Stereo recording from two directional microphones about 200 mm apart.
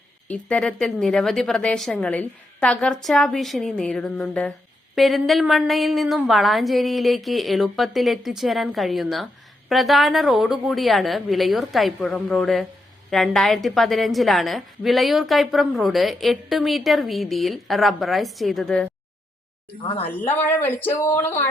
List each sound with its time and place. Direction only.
0.3 s a woman's voice: 5° left (ahead or behind)
19.8 s a woman's voice: 30° left (ahead or behind)
20.1 s speech: 10° left (ahead or behind)